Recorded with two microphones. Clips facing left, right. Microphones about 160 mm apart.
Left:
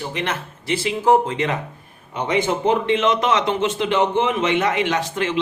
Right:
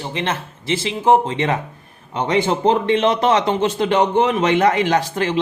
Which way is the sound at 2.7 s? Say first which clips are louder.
Right 2 dB; 35° right (ahead or behind).